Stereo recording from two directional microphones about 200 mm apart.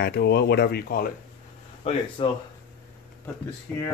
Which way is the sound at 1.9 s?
25° left (ahead or behind).